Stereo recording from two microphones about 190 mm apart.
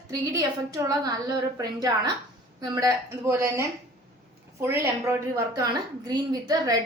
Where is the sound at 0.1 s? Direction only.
20° right (ahead or behind).